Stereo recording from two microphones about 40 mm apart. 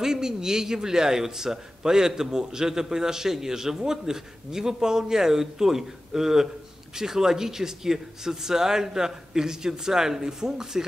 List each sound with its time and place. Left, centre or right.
0.0 s a man's voice: centre